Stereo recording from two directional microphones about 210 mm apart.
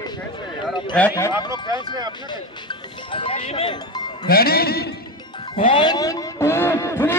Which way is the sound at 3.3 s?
25° left (ahead or behind).